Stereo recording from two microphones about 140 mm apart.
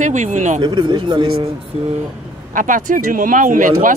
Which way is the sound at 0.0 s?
65° right (ahead or behind).